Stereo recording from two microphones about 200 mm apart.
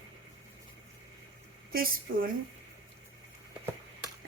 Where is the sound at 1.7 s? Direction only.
45° right (ahead or behind).